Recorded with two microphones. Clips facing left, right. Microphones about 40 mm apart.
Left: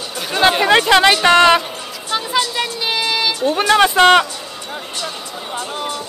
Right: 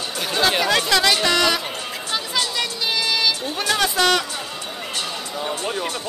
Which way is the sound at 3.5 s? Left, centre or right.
Left.